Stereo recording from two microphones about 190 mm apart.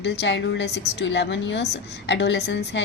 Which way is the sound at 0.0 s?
65° left (ahead or behind).